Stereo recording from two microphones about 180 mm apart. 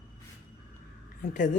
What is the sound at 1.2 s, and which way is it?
Speech, 45° left (ahead or behind).